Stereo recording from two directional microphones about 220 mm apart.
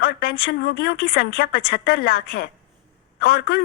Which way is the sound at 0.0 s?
45° left (ahead or behind).